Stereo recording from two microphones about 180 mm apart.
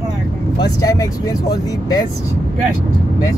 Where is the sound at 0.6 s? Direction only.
20° left (ahead or behind).